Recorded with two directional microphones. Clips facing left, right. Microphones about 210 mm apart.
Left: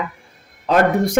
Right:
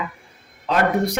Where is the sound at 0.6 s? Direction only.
50° left (ahead or behind).